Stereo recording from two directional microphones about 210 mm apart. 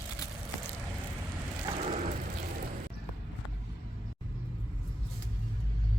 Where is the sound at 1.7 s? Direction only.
35° right (ahead or behind).